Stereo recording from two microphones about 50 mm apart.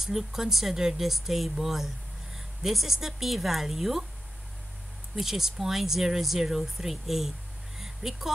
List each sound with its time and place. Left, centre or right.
0.0 s speech: centre
5.2 s speech: centre